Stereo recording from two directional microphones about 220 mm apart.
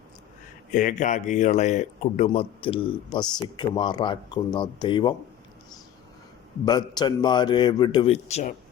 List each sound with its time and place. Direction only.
0.7 s a man's voice: 35° left (ahead or behind); by 5.1 s 20° left (ahead or behind)
6.7 s a man's voice: 20° left (ahead or behind)